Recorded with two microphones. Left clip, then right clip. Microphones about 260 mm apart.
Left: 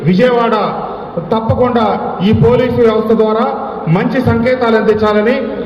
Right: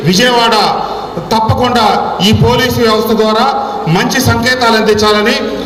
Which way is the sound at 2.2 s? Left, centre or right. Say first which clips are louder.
Left 2 dB; right.